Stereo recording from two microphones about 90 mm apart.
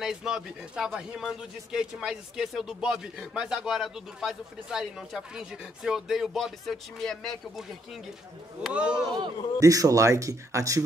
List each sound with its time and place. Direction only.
0.0 s a man's voice: 5° right (ahead or behind)
8.6 s speech: 10° right (ahead or behind)
9.6 s speech: 40° right (ahead or behind)